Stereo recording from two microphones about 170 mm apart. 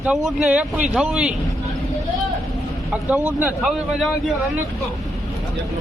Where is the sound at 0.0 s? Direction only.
5° right (ahead or behind).